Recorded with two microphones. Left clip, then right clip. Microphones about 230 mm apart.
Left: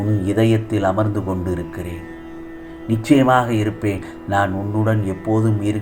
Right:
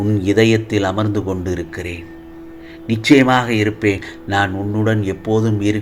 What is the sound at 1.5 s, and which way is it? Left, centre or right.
Speech, right.